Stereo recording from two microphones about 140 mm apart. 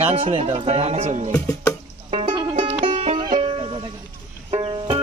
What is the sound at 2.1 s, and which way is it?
Music, 45° right (ahead or behind).